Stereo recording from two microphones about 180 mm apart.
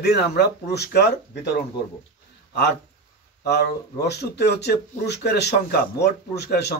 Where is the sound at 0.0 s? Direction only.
65° left (ahead or behind).